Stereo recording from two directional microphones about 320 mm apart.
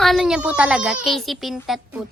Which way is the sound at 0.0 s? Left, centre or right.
Centre.